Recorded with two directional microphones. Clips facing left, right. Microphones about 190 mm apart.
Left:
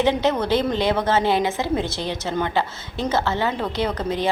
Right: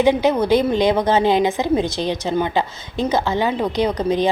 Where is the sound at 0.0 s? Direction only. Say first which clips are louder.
Right 4 dB; 10° right (ahead or behind).